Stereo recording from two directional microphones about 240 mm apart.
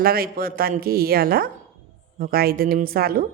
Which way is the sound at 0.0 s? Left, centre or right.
Right.